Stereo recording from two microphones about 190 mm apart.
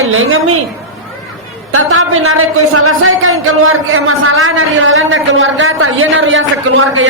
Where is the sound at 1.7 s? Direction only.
90° right.